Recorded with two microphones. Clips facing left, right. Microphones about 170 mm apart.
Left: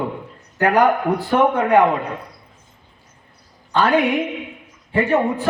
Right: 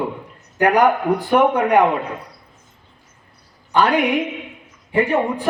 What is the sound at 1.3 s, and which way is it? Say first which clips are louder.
Speech: even; 15° right (ahead or behind).